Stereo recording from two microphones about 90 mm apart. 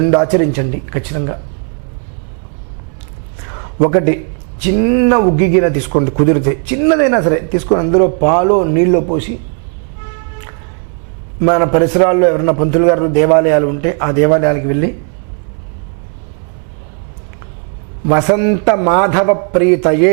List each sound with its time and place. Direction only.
0.0 s speech: 15° right (ahead or behind)
3.5 s a sound: 15° right (ahead or behind)
4.6 s speech: 15° right (ahead or behind)
11.3 s speech: 15° right (ahead or behind)
18.0 s speech: 15° right (ahead or behind)